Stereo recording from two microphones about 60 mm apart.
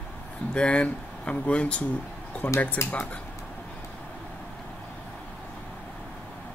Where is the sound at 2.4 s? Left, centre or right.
Left.